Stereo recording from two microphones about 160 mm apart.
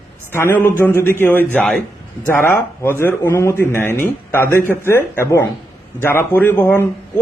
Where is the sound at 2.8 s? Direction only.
15° left (ahead or behind).